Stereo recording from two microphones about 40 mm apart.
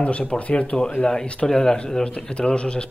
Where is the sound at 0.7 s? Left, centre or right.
Centre.